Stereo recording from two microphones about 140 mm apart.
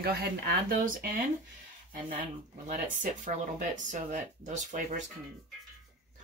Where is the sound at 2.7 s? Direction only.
70° right (ahead or behind).